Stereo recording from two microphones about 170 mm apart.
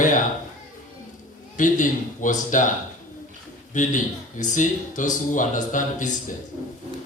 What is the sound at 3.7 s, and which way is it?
Speech, 50° left (ahead or behind).